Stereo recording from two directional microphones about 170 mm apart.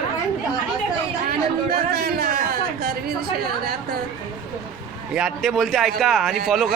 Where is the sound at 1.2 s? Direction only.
65° right (ahead or behind).